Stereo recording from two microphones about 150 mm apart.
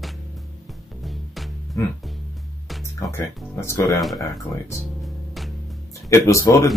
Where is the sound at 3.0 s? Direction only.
15° left (ahead or behind).